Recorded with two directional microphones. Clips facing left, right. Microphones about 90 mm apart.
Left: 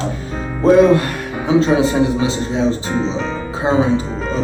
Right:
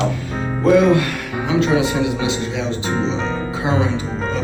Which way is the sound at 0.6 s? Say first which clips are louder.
Left 3 dB; 35° left (ahead or behind).